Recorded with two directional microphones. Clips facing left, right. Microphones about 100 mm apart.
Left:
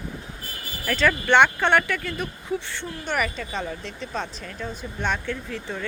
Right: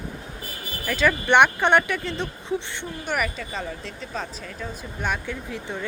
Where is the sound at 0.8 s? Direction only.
5° right (ahead or behind).